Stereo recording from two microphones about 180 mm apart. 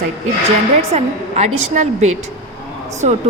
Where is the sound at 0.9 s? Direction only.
40° right (ahead or behind).